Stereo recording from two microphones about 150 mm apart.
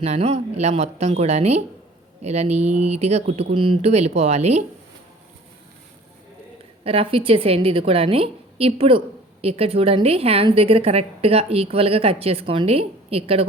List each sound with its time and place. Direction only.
0.0 s speech: 45° right (ahead or behind)
3.8 s speech: 45° right (ahead or behind)
6.8 s a woman's voice: 40° right (ahead or behind)